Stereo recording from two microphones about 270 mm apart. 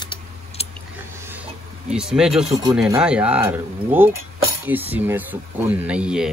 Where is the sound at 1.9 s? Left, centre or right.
Centre.